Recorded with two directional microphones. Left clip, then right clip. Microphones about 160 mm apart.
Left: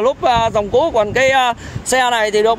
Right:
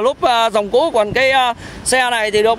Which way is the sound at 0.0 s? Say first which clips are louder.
Even; 40° right (ahead or behind).